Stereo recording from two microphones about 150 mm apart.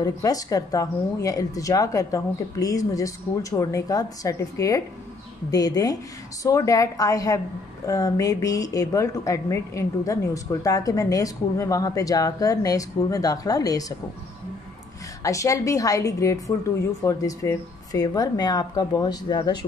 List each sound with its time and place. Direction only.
0.0 s speech: 25° left (ahead or behind)
15.2 s speech: 20° left (ahead or behind)